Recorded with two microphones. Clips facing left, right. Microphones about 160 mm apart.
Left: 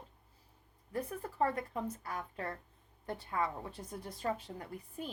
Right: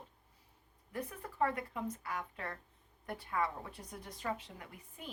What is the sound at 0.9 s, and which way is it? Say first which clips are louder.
Speech: left 4 dB; 35° left (ahead or behind).